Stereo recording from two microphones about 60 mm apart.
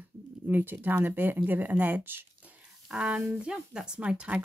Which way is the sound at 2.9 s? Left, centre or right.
Centre.